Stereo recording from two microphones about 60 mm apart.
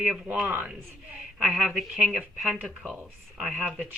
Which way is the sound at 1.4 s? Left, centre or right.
Centre.